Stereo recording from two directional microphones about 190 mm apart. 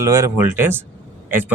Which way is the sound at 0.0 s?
15° right (ahead or behind).